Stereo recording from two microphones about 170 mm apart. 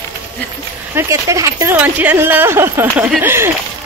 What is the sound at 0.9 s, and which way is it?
Speech, 20° right (ahead or behind).